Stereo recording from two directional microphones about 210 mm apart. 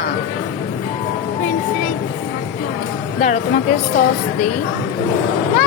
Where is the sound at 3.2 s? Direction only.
35° left (ahead or behind).